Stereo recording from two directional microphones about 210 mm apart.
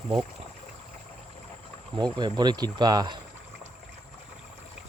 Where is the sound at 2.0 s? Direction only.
20° right (ahead or behind).